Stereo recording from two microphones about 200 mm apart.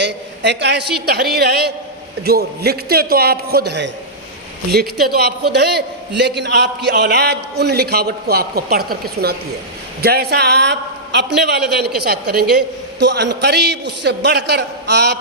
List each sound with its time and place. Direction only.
0.0 s a man's voice: 60° right (ahead or behind)